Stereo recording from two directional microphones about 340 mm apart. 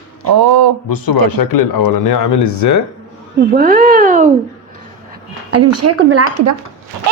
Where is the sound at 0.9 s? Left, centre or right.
Left.